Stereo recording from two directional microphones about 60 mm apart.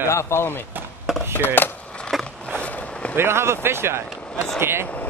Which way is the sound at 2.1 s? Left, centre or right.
Centre.